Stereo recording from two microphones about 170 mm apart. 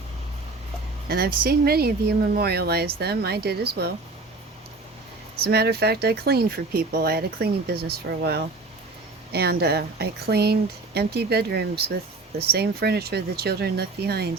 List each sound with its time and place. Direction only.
1.0 s speech: 65° right (ahead or behind)
5.4 s speech: 70° right (ahead or behind)